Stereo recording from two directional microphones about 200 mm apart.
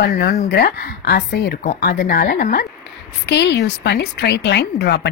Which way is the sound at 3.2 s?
60° left (ahead or behind).